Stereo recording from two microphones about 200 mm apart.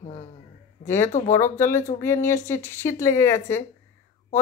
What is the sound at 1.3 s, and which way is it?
Speech, 15° left (ahead or behind).